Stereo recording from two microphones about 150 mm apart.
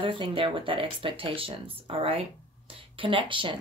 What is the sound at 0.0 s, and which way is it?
Speech, 35° right (ahead or behind).